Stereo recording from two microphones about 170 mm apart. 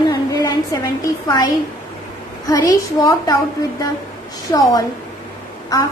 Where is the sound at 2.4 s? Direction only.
20° left (ahead or behind).